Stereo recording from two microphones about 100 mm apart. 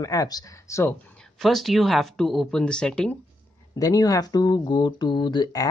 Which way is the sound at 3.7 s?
40° left (ahead or behind).